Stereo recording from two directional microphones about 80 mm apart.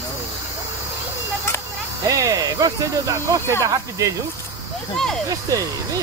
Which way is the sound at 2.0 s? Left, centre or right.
Right.